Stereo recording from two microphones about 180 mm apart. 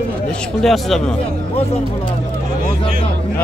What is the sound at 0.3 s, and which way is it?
Speech, 5° left (ahead or behind).